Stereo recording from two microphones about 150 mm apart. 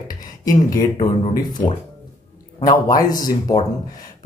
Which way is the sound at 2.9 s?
25° left (ahead or behind).